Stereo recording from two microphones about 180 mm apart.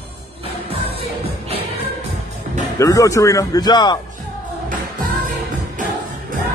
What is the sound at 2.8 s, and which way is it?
A man's voice, 20° left (ahead or behind).